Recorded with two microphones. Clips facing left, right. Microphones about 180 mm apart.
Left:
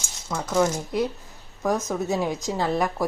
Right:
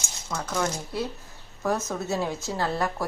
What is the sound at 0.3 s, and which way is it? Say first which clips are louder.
Speech: left 6 dB; 15° left (ahead or behind).